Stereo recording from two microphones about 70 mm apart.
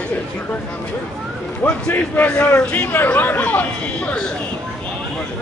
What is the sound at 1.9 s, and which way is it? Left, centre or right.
Speech, left.